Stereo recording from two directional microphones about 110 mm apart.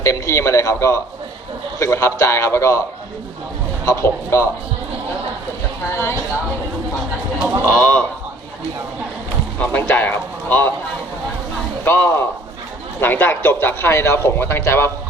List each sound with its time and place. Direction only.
0.0 s a man's voice: 25° left (ahead or behind)
3.8 s a man's voice: 25° left (ahead or behind)
5.9 s a man's voice: 25° left (ahead or behind)
7.6 s speech: 10° left (ahead or behind)
9.6 s a sound: 15° left (ahead or behind)
11.9 s a man's voice: 20° left (ahead or behind)